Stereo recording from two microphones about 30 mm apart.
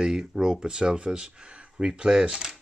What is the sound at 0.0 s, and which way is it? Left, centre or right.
Speech, right.